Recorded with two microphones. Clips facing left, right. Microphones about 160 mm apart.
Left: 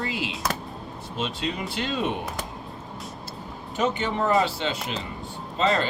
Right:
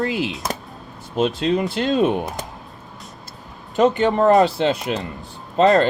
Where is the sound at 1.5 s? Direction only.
45° right (ahead or behind).